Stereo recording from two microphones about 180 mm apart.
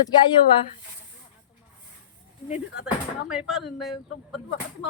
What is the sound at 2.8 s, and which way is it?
Speech, 5° right (ahead or behind).